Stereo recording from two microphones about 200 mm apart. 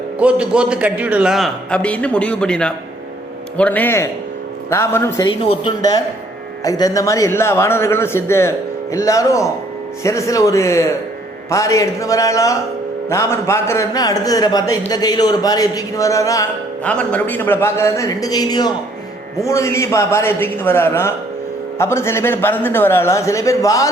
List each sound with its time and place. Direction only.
0.2 s a man's voice: 5° right (ahead or behind); by 5.3 s 15° left (ahead or behind)
5.3 s a man's voice: 25° left (ahead or behind)